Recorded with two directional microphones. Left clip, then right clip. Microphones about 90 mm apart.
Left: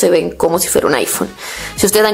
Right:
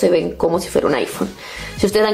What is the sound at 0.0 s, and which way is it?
Speech, 35° left (ahead or behind).